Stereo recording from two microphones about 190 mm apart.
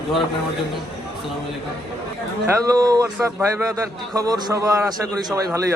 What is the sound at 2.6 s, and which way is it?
A man's voice, 20° right (ahead or behind).